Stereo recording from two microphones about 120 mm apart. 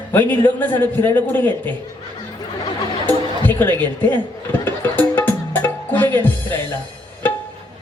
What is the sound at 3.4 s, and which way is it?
Speech, 15° left (ahead or behind).